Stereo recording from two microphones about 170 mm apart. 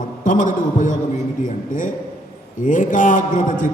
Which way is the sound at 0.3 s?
50° left (ahead or behind).